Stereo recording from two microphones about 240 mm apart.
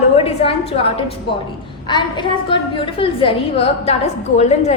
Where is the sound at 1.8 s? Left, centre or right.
Centre.